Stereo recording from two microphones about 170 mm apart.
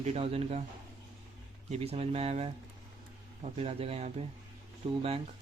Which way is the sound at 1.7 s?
35° right (ahead or behind).